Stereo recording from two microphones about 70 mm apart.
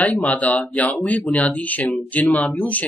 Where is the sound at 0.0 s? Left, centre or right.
Centre.